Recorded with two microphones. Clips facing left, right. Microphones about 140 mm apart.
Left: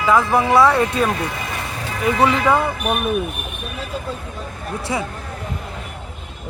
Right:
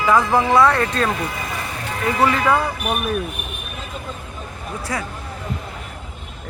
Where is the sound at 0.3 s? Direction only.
10° left (ahead or behind).